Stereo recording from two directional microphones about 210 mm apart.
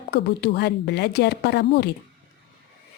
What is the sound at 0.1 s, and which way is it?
Speech, 50° left (ahead or behind).